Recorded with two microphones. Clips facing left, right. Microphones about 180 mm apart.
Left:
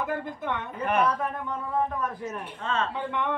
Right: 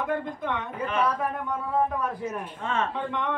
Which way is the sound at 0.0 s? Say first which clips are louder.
Right 2 dB; 5° left (ahead or behind).